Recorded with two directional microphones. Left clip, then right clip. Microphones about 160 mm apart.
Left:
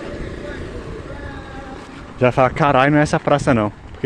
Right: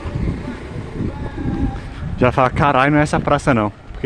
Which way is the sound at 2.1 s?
20° right (ahead or behind).